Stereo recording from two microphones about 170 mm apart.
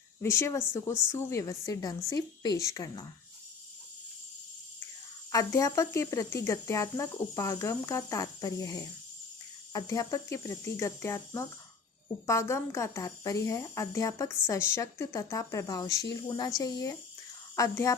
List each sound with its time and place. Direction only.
0.2 s speech: 15° left (ahead or behind)
5.3 s speech: 20° left (ahead or behind)